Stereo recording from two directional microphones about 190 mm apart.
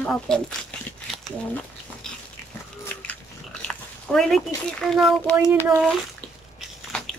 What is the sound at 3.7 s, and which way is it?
Speech, 5° left (ahead or behind).